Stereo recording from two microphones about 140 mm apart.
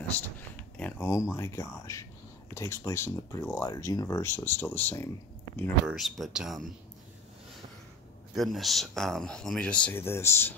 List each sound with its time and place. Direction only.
0.7 s speech: 15° left (ahead or behind)
5.9 s speech: centre (ahead or behind)
8.4 s speech: centre (ahead or behind); by 10.5 s 20° left (ahead or behind)